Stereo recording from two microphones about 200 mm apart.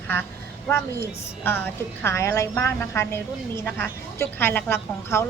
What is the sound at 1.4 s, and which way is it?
A woman's voice, 10° left (ahead or behind).